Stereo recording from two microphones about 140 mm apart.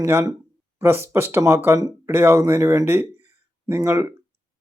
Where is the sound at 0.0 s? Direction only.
20° right (ahead or behind).